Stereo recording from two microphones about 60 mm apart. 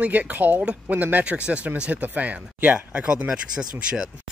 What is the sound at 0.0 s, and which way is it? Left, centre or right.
Speech, right.